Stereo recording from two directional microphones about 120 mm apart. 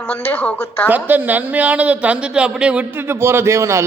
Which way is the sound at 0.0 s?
10° left (ahead or behind).